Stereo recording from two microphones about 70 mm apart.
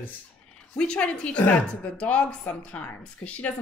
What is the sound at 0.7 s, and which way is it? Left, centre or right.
A woman's voice, centre.